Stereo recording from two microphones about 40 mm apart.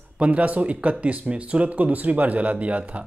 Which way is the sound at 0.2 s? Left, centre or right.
Right.